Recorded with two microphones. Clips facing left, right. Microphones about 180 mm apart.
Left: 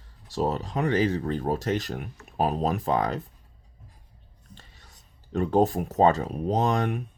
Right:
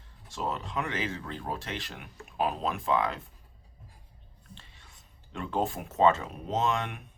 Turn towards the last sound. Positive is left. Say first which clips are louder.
# left 5 dB
turn(degrees=40)  # may be behind; listen again after turning